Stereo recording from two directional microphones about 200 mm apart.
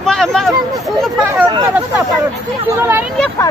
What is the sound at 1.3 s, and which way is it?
Speech, 15° right (ahead or behind).